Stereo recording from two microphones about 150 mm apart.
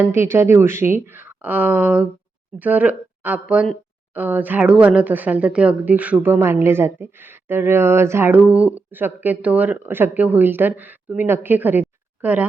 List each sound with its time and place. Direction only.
0.0 s speech: 15° right (ahead or behind)